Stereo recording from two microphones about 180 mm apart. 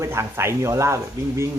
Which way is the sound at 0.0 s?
15° right (ahead or behind).